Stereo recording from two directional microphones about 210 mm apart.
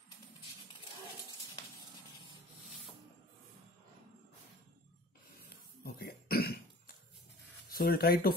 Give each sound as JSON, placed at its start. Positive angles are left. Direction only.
{"t": 5.9, "sound": "cough", "side_deg": 45}
{"t": 7.7, "sound": "speech", "side_deg": 45}